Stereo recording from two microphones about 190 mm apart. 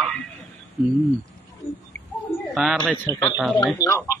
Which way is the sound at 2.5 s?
Centre (ahead or behind).